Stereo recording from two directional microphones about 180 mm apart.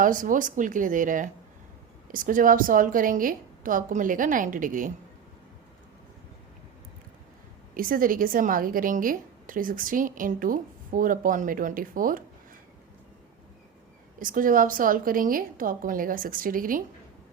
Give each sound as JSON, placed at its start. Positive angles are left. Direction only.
{"t": 0.0, "sound": "a woman's voice", "side_deg": -45}
{"t": 7.8, "sound": "a woman's voice", "side_deg": -50}
{"t": 14.2, "sound": "a woman's voice", "side_deg": -50}